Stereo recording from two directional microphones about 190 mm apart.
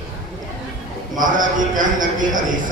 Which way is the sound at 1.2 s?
45° right (ahead or behind).